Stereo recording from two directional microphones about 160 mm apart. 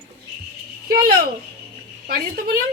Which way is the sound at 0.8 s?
65° right (ahead or behind).